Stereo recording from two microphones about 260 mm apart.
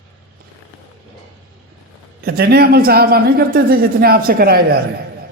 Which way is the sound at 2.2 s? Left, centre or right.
Right.